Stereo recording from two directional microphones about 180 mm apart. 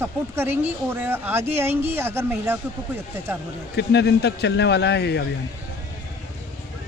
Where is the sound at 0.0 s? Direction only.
15° right (ahead or behind).